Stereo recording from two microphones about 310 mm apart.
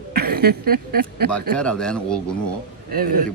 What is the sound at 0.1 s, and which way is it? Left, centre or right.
Speech, right.